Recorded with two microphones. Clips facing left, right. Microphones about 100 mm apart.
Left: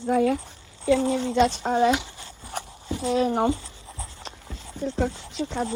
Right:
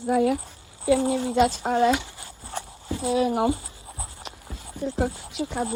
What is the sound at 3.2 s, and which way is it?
Speech, 30° left (ahead or behind).